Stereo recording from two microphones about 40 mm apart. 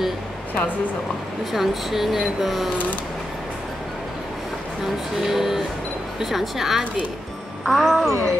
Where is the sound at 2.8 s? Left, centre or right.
Left.